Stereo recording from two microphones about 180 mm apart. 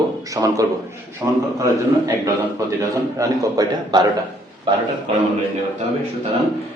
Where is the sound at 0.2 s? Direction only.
20° right (ahead or behind).